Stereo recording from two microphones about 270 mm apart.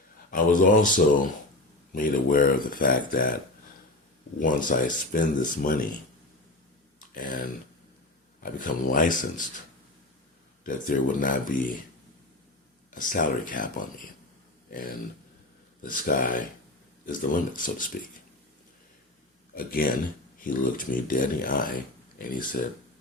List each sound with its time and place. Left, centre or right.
0.3 s speech: left
4.4 s speech: left
7.0 s a sound: left
8.5 s speech: left
10.6 s speech: left
12.9 s speech: left
19.5 s speech: left